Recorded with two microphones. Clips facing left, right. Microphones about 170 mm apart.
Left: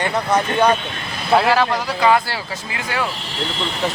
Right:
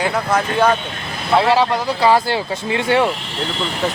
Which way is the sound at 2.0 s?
30° right (ahead or behind).